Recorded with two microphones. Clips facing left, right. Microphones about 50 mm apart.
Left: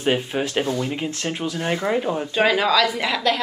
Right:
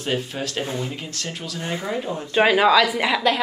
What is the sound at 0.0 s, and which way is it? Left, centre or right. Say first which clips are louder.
Speech: left 4 dB; left.